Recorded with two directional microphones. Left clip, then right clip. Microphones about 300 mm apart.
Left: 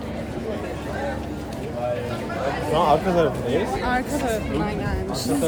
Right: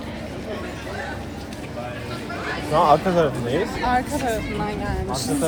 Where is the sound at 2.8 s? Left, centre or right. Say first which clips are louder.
Right 3 dB; right.